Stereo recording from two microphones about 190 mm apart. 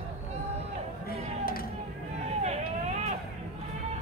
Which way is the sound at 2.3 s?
35° right (ahead or behind).